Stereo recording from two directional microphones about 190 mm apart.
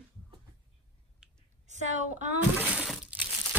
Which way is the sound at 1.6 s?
40° right (ahead or behind).